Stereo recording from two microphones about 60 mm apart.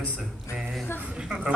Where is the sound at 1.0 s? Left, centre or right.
Centre.